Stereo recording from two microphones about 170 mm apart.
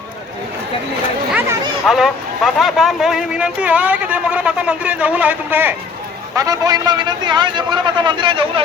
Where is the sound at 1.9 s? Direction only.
Centre (ahead or behind).